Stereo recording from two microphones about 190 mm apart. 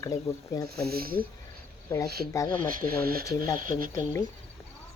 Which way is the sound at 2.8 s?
50° right (ahead or behind).